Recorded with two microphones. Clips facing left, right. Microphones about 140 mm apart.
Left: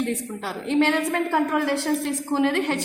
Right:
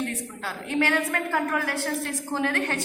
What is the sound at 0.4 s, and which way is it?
A woman's voice, 20° left (ahead or behind).